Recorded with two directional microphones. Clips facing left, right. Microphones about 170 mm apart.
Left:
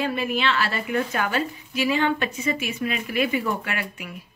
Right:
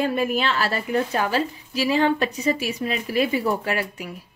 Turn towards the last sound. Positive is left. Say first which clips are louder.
# right 5 dB
turn(degrees=-35)  # may be behind; listen again after turning